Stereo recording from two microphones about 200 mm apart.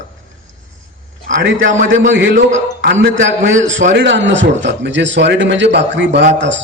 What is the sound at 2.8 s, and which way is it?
A man's voice, 65° right (ahead or behind).